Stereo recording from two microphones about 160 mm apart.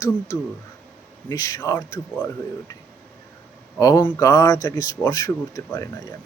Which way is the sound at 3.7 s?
20° left (ahead or behind).